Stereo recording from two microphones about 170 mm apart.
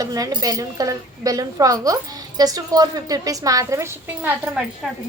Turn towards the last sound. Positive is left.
turn(degrees=-10)  # may be behind; listen again after turning